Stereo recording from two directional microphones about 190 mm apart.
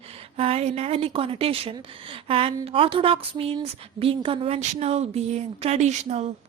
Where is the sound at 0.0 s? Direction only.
30° right (ahead or behind).